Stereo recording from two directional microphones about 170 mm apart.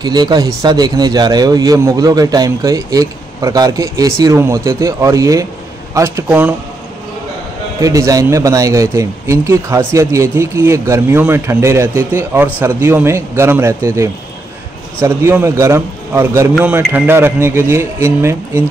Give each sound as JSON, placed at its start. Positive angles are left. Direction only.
{"t": 0.0, "sound": "a man's voice", "side_deg": -25}
{"t": 7.8, "sound": "a man's voice", "side_deg": -20}